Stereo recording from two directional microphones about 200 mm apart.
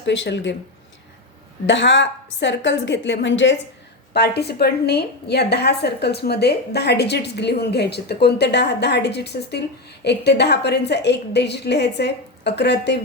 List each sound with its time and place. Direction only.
0.0 s a woman's voice: 65° left (ahead or behind)
1.6 s a woman's voice: 65° left (ahead or behind)
4.1 s a woman's voice: 55° left (ahead or behind)